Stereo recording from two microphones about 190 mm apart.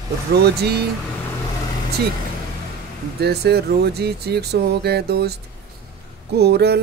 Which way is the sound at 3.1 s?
60° right (ahead or behind).